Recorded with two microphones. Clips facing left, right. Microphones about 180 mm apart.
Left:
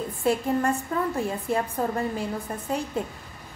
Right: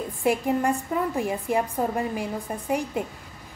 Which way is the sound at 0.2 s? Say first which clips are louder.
Right 1 dB; 15° right (ahead or behind).